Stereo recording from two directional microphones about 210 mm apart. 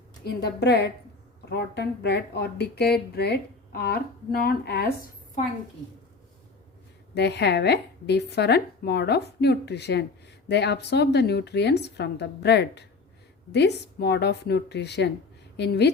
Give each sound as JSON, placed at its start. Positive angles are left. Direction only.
{"t": 0.3, "sound": "speech", "side_deg": 50}
{"t": 7.1, "sound": "speech", "side_deg": 50}